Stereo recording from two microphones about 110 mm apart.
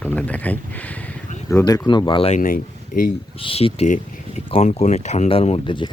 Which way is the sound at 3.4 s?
60° left (ahead or behind).